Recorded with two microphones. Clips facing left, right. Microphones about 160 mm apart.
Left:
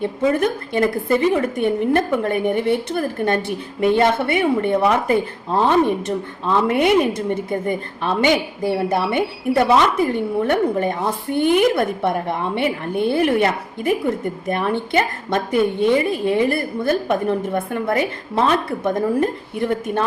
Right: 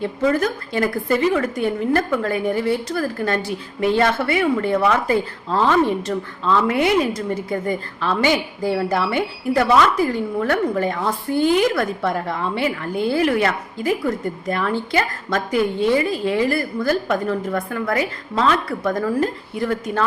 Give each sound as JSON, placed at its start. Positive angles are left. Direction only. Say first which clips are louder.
{"t": 0.0, "sound": "a woman's voice", "louder": "left 1 dB", "side_deg": 20}
{"t": 11.3, "sound": "speech", "louder": "left 1 dB", "side_deg": 60}
{"t": 11.6, "sound": "a woman's voice", "louder": "left 2 dB", "side_deg": 25}
{"t": 12.9, "sound": "speech", "louder": "left 2 dB", "side_deg": 60}
{"t": 13.1, "sound": "a woman's voice", "louder": "left 1 dB", "side_deg": 25}